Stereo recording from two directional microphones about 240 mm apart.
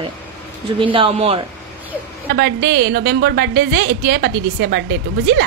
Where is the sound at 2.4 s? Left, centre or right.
Right.